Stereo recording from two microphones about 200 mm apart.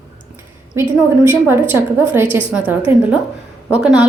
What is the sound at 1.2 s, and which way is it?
Speech, 10° right (ahead or behind).